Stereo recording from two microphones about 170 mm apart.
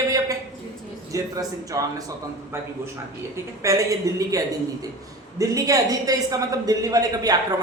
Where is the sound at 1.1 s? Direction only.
20° right (ahead or behind).